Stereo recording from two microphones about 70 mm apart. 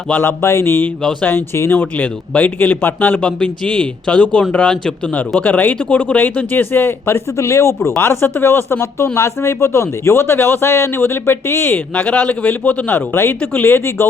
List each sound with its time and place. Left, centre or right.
0.2 s a man's voice: left
3.2 s speech: centre
5.4 s a man's voice: left